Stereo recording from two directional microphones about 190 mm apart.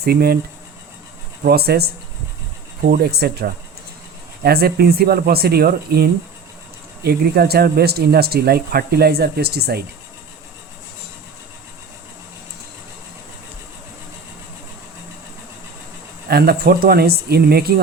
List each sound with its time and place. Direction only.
0.0 s speech: 55° right (ahead or behind)
1.5 s speech: 55° right (ahead or behind)
2.9 s speech: 60° right (ahead or behind)
16.3 s speech: 55° right (ahead or behind)